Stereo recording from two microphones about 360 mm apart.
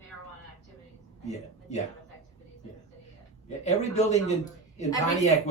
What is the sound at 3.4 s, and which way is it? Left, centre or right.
A man's voice, centre.